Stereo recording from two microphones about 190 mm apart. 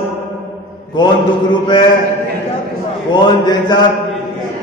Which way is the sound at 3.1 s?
25° left (ahead or behind).